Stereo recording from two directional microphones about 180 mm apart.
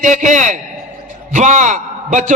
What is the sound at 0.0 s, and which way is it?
A man's voice, 45° right (ahead or behind).